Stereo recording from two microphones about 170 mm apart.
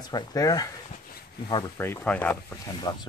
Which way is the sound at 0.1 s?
20° left (ahead or behind).